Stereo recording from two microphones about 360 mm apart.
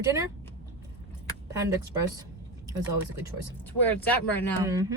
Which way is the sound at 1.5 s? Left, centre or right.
Centre.